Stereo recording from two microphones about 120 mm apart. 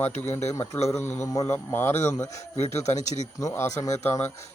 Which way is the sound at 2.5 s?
65° left (ahead or behind).